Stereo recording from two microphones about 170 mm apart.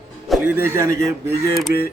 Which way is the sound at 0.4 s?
10° right (ahead or behind).